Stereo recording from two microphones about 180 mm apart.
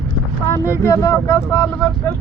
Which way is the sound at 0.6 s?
15° left (ahead or behind).